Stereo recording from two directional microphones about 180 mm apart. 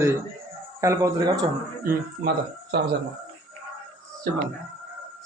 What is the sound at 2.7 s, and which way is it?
Speech, 65° right (ahead or behind).